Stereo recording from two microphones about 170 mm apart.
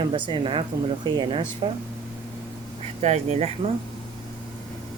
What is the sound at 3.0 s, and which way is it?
Speech, 40° right (ahead or behind).